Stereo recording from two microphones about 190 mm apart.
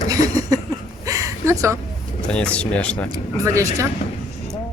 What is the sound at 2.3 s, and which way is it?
Speech, 5° left (ahead or behind).